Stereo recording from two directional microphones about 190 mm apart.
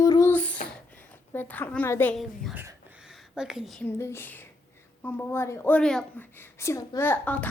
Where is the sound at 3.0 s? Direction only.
5° right (ahead or behind).